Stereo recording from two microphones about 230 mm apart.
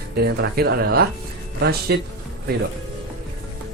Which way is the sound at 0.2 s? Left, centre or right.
Right.